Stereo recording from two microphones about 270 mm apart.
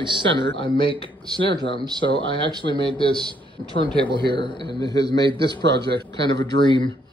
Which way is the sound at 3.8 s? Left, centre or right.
Centre.